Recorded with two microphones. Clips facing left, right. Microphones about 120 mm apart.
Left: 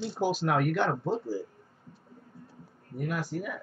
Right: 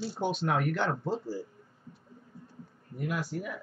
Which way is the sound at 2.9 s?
Centre (ahead or behind).